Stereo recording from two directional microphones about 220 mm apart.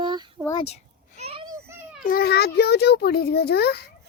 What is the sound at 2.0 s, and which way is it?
A child's voice, 45° left (ahead or behind).